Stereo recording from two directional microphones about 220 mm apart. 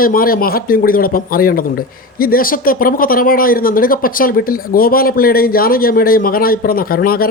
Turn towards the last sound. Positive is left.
turn(degrees=40)  # may be behind; listen again after turning